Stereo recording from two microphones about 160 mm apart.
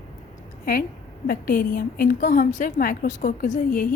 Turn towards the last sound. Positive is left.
turn(degrees=55)  # may be behind; listen again after turning